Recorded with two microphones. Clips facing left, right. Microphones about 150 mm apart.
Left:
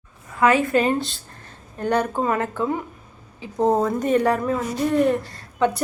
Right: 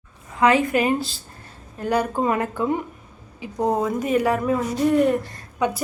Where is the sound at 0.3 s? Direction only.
20° right (ahead or behind).